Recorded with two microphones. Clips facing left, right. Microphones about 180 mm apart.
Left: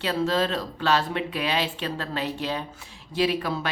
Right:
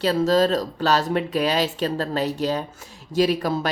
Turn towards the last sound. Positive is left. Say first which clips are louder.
# right 4 dB
turn(degrees=-40)  # may be behind; listen again after turning